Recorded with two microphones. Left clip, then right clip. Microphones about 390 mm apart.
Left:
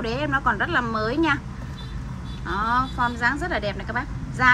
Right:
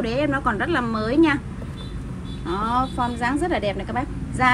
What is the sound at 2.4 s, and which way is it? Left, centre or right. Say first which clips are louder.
A woman's voice: even; right.